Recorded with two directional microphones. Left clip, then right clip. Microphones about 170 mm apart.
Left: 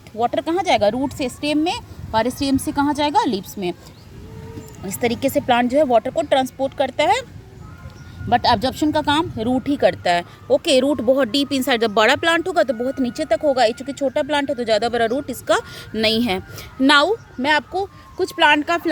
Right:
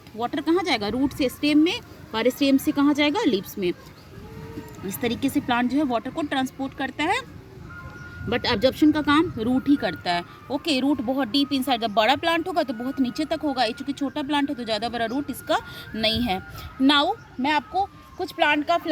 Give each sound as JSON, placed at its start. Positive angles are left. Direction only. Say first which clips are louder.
{"t": 0.2, "sound": "speech", "louder": "left 4 dB", "side_deg": 35}
{"t": 4.9, "sound": "speech", "louder": "left 6 dB", "side_deg": 40}
{"t": 8.3, "sound": "speech", "louder": "left 5 dB", "side_deg": 30}
{"t": 9.6, "sound": "speech", "louder": "left 9 dB", "side_deg": 45}